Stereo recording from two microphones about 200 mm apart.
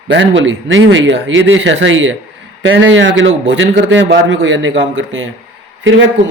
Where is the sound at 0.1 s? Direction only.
65° right (ahead or behind).